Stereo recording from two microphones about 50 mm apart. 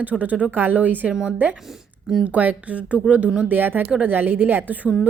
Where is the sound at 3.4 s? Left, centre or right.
Right.